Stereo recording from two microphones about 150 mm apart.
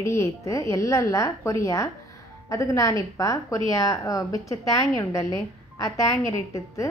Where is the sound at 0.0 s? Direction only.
20° left (ahead or behind).